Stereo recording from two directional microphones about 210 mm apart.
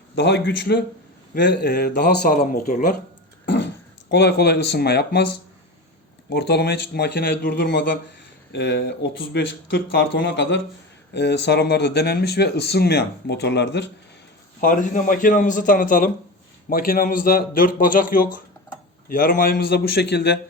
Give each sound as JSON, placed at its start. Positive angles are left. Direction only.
{"t": 0.2, "sound": "speech", "side_deg": 55}
{"t": 3.4, "sound": "throat clearing", "side_deg": 60}
{"t": 4.1, "sound": "speech", "side_deg": 50}
{"t": 14.6, "sound": "speech", "side_deg": 40}